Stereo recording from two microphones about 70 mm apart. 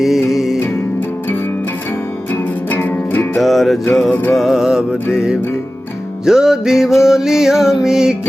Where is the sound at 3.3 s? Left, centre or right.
Centre.